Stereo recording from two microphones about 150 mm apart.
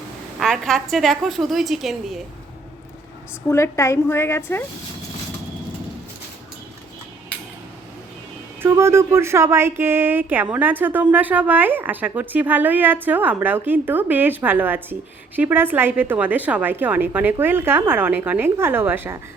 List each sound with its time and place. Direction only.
0.3 s a woman's voice: centre (ahead or behind)
3.4 s a woman's voice: 20° left (ahead or behind)
8.6 s speech: 15° right (ahead or behind)